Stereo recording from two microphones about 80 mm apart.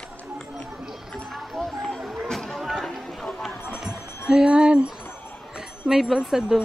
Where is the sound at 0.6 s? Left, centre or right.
Centre.